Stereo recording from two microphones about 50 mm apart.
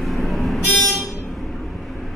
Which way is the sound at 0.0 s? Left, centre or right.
Centre.